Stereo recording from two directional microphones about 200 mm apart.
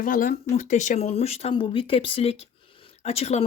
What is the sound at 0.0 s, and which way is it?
Speech, 45° left (ahead or behind).